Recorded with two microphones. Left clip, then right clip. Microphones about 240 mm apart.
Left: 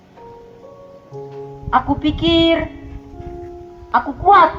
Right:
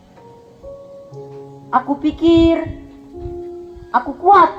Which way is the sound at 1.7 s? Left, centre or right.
Left.